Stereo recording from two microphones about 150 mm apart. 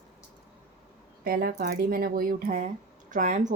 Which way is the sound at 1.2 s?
85° right.